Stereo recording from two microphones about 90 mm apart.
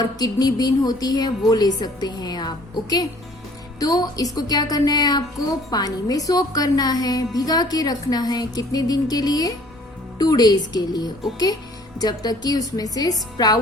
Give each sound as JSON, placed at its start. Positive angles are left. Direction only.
{"t": 0.0, "sound": "speech", "side_deg": 45}